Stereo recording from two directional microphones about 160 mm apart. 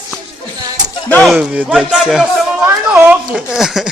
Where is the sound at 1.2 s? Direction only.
5° right (ahead or behind).